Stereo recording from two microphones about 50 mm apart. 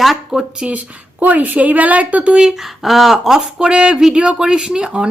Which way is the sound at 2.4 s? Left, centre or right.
Centre.